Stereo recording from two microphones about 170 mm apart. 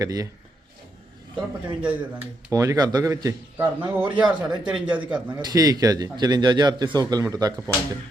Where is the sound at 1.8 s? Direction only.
10° right (ahead or behind).